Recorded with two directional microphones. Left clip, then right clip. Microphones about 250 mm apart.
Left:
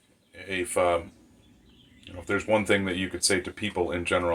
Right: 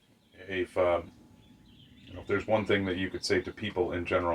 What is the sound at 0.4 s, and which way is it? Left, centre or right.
Speech, left.